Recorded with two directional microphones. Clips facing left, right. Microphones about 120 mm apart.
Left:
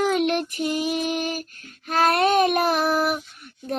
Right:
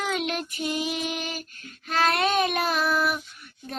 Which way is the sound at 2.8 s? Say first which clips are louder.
Left 3 dB; 55° left (ahead or behind).